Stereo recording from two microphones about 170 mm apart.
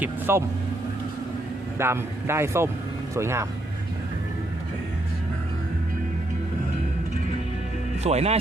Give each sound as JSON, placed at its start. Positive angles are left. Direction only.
{"t": 0.0, "sound": "vehicle", "side_deg": -15}
{"t": 1.8, "sound": "speech", "side_deg": -15}
{"t": 8.0, "sound": "speech", "side_deg": -40}